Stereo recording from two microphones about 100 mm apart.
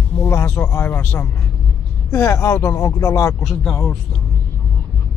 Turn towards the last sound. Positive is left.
turn(degrees=0)  # may be behind; listen again after turning